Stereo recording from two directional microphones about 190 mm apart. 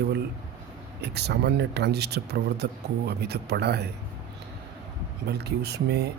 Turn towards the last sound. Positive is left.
turn(degrees=-60)  # may be behind; listen again after turning